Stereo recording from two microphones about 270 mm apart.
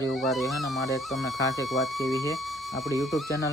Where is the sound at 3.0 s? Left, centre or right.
Centre.